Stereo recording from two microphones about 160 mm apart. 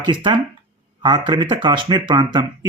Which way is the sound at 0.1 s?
30° right (ahead or behind).